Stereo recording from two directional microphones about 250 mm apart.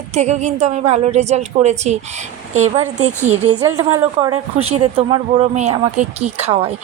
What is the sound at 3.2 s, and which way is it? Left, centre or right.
Speech, right.